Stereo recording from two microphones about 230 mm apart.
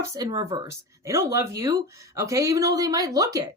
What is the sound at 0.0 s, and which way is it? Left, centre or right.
A woman's voice, centre.